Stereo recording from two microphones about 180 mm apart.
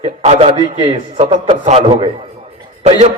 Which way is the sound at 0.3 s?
30° right (ahead or behind).